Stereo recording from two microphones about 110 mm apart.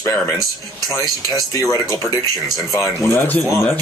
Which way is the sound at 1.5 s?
30° left (ahead or behind).